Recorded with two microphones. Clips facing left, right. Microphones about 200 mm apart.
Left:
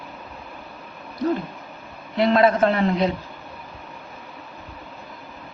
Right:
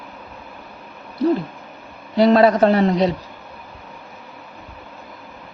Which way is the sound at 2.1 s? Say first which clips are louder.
Right 4 dB; 35° right (ahead or behind).